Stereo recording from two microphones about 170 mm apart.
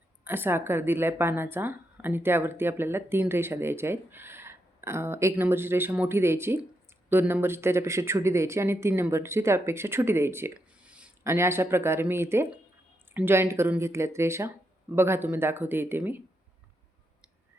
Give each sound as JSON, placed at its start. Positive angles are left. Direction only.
{"t": 0.3, "sound": "a woman's voice", "side_deg": -10}